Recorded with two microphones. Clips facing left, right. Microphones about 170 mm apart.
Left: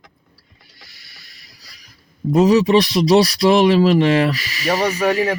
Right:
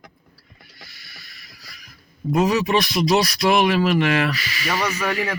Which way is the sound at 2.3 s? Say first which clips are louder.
Left 6 dB; 35° left (ahead or behind).